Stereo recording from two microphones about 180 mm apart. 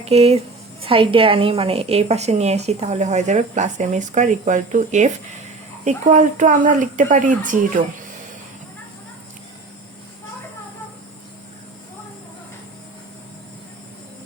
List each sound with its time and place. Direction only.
0.0 s a woman's voice: 35° right (ahead or behind)